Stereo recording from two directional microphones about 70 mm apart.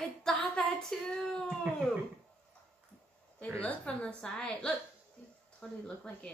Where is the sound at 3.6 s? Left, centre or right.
Centre.